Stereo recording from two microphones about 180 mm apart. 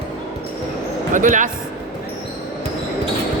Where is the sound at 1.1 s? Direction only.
45° right (ahead or behind).